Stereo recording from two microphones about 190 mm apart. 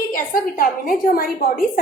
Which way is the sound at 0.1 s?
50° left (ahead or behind).